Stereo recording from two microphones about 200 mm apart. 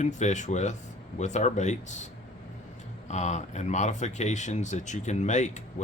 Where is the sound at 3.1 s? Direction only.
35° left (ahead or behind).